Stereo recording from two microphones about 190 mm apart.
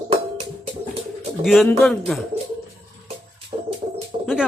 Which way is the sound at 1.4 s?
Centre (ahead or behind).